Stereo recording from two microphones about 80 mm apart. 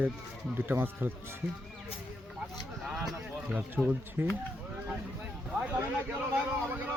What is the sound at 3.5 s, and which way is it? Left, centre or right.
Speech, centre.